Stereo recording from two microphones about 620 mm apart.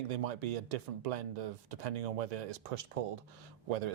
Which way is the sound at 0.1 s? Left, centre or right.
Right.